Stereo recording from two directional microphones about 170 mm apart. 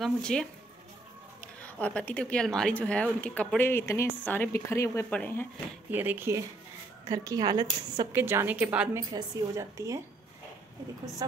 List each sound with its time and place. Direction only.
0.0 s speech: 5° left (ahead or behind)
1.6 s a woman's voice: 10° left (ahead or behind)
5.9 s a woman's voice: 10° right (ahead or behind)